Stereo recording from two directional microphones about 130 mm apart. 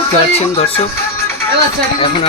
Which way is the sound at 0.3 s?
50° left (ahead or behind).